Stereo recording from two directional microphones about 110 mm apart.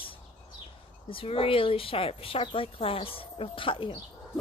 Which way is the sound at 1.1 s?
55° left (ahead or behind).